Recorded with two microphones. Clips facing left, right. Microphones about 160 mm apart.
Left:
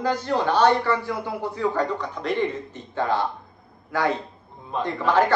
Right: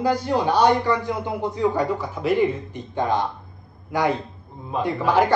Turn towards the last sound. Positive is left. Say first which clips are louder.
# right 1 dB
turn(degrees=-10)  # may be behind; listen again after turning